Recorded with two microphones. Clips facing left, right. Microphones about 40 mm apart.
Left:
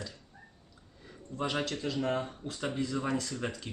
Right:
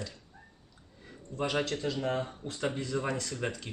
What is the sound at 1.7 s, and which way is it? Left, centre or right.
Speech, centre.